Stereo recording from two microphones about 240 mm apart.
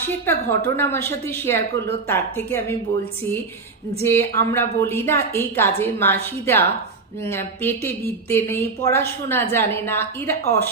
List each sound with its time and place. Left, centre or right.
0.0 s speech: centre
4.0 s speech: centre
10.4 s speech: right